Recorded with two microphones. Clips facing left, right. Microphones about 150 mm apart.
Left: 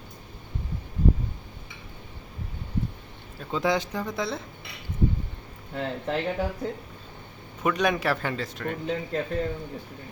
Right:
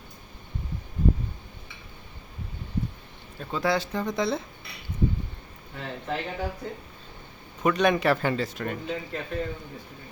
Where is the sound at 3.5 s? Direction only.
20° left (ahead or behind).